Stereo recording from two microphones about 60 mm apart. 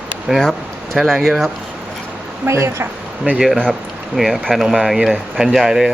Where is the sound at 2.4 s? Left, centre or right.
Right.